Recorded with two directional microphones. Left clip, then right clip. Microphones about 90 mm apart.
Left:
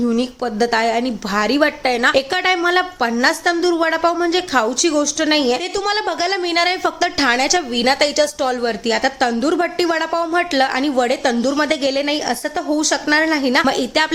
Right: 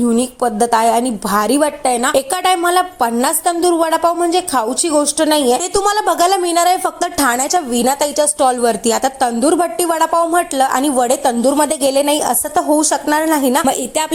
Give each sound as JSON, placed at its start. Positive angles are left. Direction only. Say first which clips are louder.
{"t": 0.6, "sound": "a woman's voice", "louder": "right 3 dB", "side_deg": -35}
{"t": 5.7, "sound": "a woman's voice", "louder": "right 5 dB", "side_deg": -45}
{"t": 6.4, "sound": "a woman's voice", "louder": "right 4 dB", "side_deg": -30}
{"t": 9.4, "sound": "a woman's voice", "louder": "right 3 dB", "side_deg": -25}